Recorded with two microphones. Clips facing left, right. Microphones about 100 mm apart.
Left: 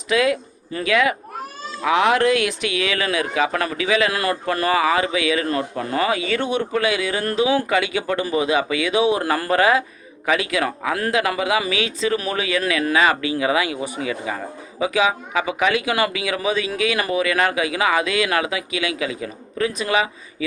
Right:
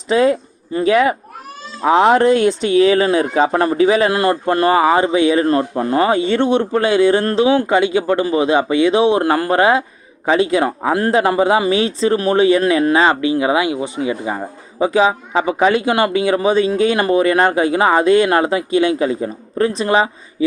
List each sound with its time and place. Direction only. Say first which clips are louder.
0.1 s speech: right 5 dB; 35° right (ahead or behind)